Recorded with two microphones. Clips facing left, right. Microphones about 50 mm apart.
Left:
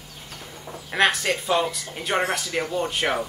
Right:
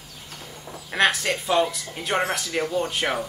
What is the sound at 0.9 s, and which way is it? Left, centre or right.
Speech, centre.